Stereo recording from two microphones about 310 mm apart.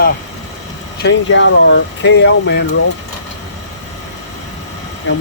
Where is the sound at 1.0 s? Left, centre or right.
Left.